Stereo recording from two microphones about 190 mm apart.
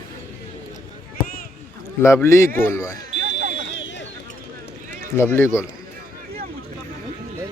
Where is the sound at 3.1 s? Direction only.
40° right (ahead or behind).